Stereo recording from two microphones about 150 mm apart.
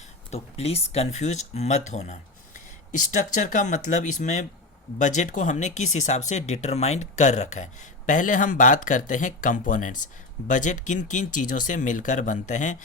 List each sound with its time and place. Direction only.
0.3 s speech: 45° left (ahead or behind)